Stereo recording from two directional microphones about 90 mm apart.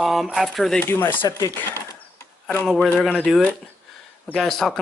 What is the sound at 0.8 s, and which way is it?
Speech, 25° left (ahead or behind).